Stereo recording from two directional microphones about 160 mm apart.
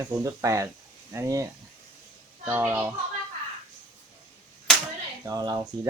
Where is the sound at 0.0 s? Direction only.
20° right (ahead or behind).